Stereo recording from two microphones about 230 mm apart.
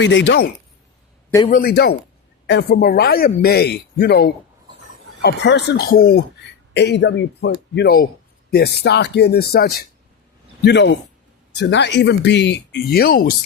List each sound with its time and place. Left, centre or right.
0.0 s speech: left
1.5 s speech: left